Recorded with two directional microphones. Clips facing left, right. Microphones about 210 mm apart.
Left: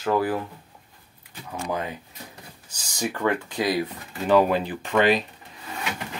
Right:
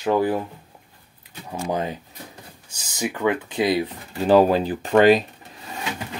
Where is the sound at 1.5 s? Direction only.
25° right (ahead or behind).